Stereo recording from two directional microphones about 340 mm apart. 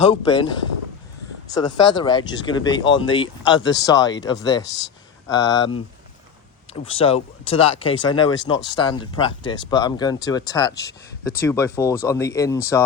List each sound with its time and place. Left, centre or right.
0.0 s speech: centre
6.9 s speech: centre